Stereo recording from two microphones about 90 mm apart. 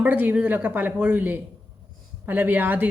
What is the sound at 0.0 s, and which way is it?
A woman's voice, 20° right (ahead or behind).